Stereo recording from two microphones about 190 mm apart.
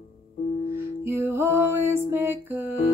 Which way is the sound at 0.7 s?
15° right (ahead or behind).